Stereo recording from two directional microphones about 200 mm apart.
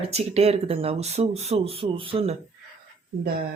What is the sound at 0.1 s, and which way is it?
Speech, 30° right (ahead or behind).